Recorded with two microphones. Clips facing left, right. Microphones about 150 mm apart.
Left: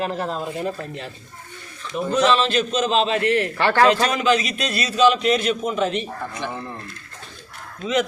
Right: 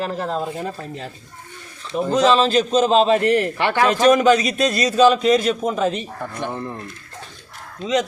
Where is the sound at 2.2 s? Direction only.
35° right (ahead or behind).